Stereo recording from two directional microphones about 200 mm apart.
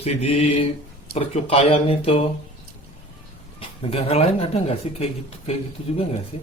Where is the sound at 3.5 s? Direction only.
30° left (ahead or behind).